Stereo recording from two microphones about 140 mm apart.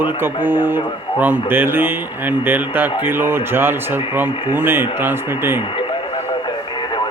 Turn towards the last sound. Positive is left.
turn(degrees=-15)  # may be behind; listen again after turning